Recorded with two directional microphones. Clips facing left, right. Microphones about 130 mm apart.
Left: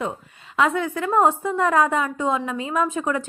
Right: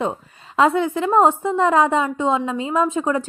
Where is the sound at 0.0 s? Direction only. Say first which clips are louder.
Right 4 dB; 30° right (ahead or behind).